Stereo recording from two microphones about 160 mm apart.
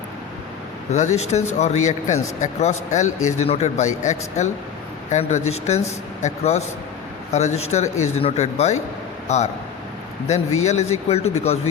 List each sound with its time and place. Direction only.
0.9 s speech: 45° left (ahead or behind)